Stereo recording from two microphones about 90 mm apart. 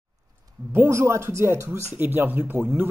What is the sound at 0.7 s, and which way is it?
Speech, 30° right (ahead or behind).